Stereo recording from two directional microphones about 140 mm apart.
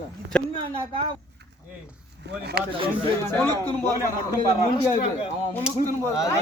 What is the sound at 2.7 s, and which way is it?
Speech, 40° right (ahead or behind).